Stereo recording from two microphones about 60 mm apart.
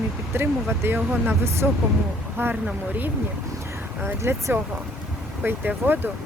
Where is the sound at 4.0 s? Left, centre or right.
Right.